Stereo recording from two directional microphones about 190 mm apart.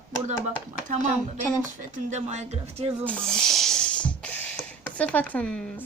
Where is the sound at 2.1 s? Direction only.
35° right (ahead or behind).